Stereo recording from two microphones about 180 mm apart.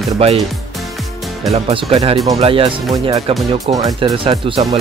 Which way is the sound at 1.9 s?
20° right (ahead or behind).